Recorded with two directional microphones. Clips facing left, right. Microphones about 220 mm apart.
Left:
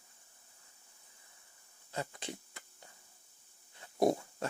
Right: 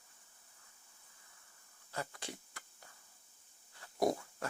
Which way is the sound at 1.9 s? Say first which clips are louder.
Left 3 dB; 20° left (ahead or behind).